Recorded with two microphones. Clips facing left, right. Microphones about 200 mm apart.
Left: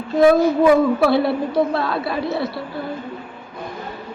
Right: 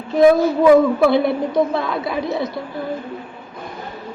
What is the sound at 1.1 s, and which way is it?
Speech, 20° right (ahead or behind).